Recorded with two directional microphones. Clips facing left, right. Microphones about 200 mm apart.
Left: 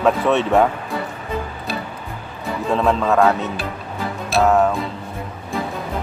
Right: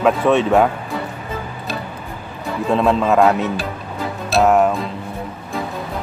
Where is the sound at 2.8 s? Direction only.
15° right (ahead or behind).